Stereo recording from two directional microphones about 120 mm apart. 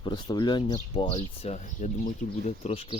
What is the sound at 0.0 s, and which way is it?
Speech, 40° left (ahead or behind).